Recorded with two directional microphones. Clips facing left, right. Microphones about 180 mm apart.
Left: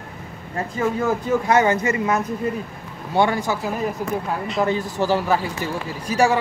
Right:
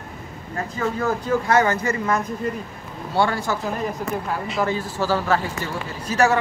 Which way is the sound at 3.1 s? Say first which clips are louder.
Left 2 dB; 15° left (ahead or behind).